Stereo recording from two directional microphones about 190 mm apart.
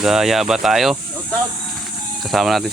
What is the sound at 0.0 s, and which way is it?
Speech, centre (ahead or behind).